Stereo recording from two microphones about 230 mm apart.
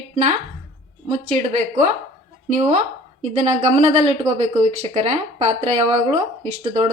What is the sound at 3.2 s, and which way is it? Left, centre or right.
A woman's voice, right.